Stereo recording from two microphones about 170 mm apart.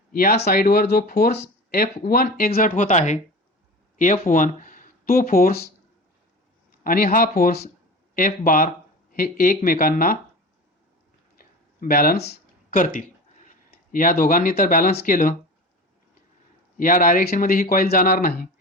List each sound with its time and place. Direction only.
0.1 s speech: 60° left (ahead or behind)
6.8 s speech: 55° left (ahead or behind)
8.1 s speech: 55° left (ahead or behind)
11.3 s a sound: 55° left (ahead or behind)
12.3 s speech: 55° left (ahead or behind)
16.7 s speech: 55° left (ahead or behind)